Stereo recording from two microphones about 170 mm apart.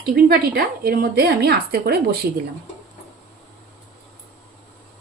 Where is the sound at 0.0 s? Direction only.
65° right (ahead or behind).